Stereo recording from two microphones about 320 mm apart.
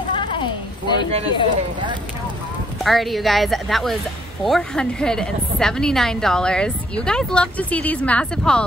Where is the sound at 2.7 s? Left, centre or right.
Centre.